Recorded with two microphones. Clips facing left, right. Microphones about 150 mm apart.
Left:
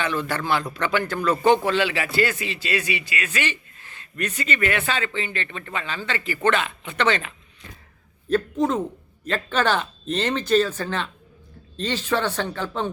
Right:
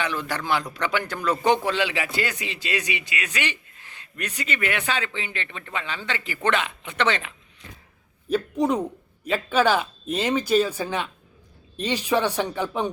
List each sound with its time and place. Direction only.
0.0 s speech: 10° right (ahead or behind)